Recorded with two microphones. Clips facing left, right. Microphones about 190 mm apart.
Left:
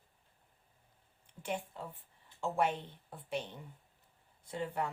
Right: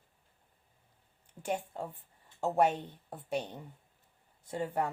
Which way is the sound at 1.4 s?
45° right (ahead or behind).